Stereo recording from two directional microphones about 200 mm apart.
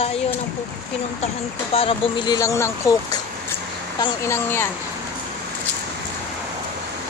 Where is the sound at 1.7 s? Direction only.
25° left (ahead or behind); by 4.7 s 10° left (ahead or behind).